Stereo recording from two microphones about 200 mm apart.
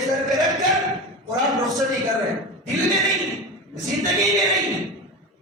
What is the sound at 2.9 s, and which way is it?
Speech, centre (ahead or behind).